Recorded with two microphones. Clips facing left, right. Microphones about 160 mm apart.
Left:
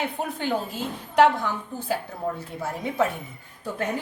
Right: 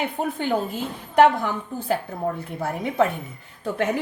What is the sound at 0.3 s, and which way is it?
Speech, 50° right (ahead or behind).